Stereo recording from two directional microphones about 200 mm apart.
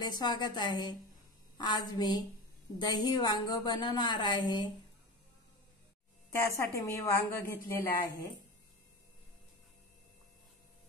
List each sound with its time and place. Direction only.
0.1 s a woman's voice: 20° left (ahead or behind)
6.3 s a woman's voice: 15° left (ahead or behind)